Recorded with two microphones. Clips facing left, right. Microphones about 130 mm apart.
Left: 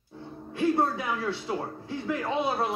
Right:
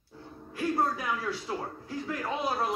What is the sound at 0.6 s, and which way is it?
Speech, 25° left (ahead or behind).